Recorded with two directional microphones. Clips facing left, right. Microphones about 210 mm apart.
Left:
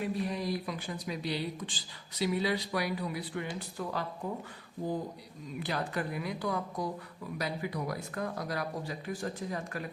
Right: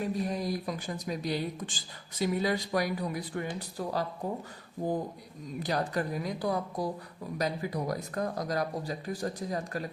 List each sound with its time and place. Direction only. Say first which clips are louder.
0.0 s speech: right 2 dB; 45° right (ahead or behind)
3.8 s speech: right 3 dB; 35° right (ahead or behind)
5.5 s speech: right 4 dB; 40° right (ahead or behind)